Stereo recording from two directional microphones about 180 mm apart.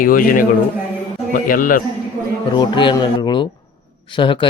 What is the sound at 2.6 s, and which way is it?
Speech, 25° left (ahead or behind).